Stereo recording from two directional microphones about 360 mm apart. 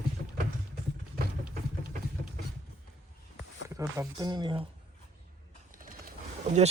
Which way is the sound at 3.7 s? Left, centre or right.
Centre.